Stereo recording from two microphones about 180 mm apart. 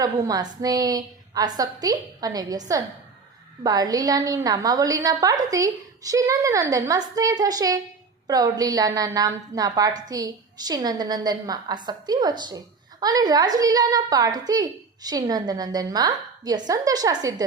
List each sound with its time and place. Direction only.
0.0 s a woman's voice: 20° right (ahead or behind)